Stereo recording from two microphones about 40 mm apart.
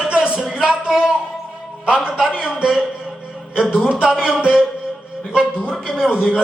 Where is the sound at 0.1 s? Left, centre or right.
Right.